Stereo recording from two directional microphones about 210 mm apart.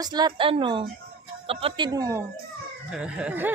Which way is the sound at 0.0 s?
20° right (ahead or behind).